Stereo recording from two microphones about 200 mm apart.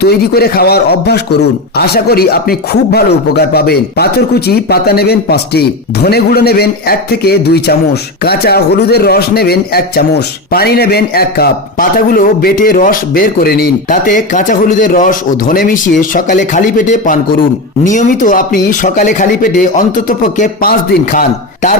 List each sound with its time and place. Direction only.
0.0 s a man's voice: 50° left (ahead or behind)